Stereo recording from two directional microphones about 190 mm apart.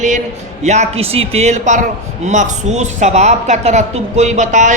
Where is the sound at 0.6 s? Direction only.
35° right (ahead or behind).